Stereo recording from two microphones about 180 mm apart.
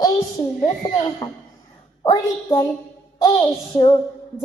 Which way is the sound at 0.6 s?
20° left (ahead or behind).